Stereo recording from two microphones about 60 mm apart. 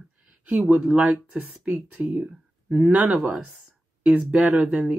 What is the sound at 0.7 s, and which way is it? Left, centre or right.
Speech, centre.